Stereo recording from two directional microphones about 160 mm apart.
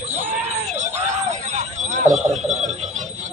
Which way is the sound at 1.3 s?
50° right (ahead or behind).